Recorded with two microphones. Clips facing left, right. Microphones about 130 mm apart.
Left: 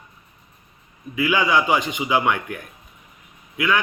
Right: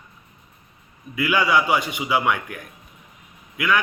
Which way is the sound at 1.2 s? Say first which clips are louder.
Even; 15° left (ahead or behind).